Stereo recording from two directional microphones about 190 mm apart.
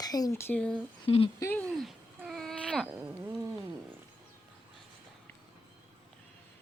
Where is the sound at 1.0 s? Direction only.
30° left (ahead or behind).